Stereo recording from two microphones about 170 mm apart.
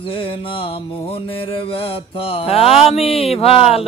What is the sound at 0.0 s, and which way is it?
Mantra, 30° left (ahead or behind).